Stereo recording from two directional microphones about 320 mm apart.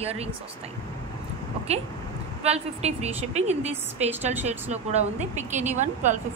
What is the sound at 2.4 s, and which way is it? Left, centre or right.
Speech, centre.